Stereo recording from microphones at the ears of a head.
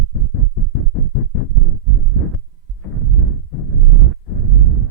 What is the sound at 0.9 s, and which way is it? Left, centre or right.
Heart murmur, left.